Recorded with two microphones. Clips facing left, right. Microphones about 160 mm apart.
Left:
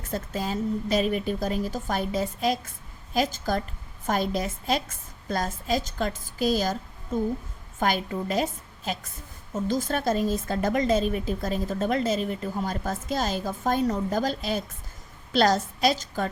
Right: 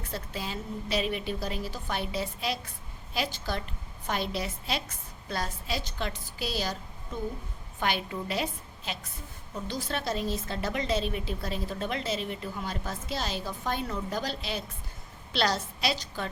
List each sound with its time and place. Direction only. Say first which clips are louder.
0.1 s a woman's voice: left 7 dB; 45° left (ahead or behind)